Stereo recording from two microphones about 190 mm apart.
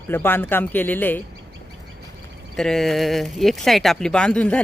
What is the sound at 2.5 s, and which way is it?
Speech, 5° left (ahead or behind).